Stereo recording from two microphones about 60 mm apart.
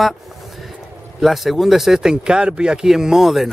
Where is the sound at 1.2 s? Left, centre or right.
Centre.